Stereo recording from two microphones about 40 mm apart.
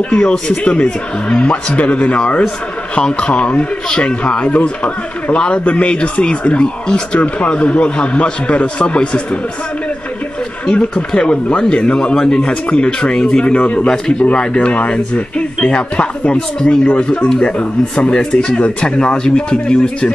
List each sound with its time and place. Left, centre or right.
0.1 s speech: left
11.1 s speech: left